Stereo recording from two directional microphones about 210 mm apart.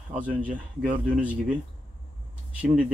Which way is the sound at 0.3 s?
5° right (ahead or behind).